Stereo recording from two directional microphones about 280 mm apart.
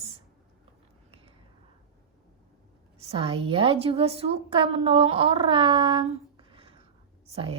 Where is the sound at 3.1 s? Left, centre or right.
Right.